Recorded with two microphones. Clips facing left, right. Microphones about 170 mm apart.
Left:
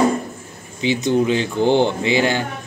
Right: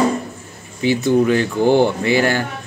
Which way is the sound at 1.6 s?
10° right (ahead or behind).